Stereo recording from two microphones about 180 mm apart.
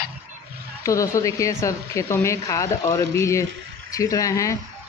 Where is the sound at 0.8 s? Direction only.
15° left (ahead or behind).